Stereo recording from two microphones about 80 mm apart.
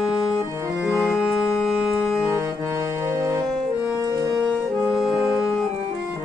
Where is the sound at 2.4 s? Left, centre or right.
Right.